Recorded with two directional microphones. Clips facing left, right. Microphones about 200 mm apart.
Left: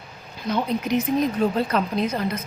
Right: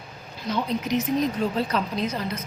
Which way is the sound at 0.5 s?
55° left (ahead or behind).